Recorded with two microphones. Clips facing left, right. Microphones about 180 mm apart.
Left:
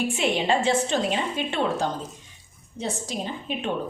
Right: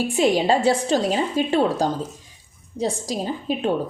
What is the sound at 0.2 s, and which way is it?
Speech, 35° right (ahead or behind).